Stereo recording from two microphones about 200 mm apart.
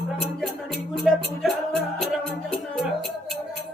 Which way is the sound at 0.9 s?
Centre (ahead or behind).